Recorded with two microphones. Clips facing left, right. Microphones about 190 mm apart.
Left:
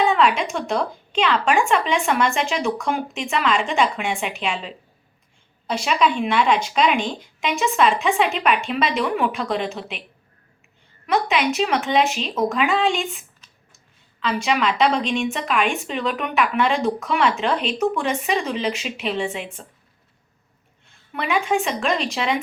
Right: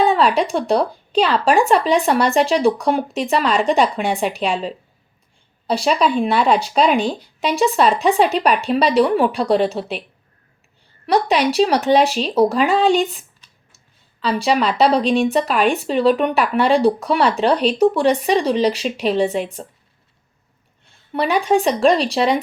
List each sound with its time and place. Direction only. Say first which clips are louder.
0.0 s speech: right 3 dB; 35° right (ahead or behind)
11.0 s speech: right 4 dB; 35° right (ahead or behind)
21.1 s speech: right 5 dB; 35° right (ahead or behind)